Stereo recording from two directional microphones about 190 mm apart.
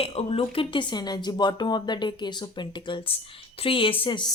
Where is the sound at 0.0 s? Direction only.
30° left (ahead or behind).